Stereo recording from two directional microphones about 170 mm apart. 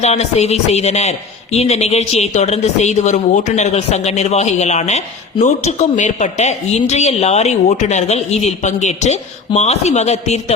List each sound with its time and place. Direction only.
0.0 s speech: 40° left (ahead or behind)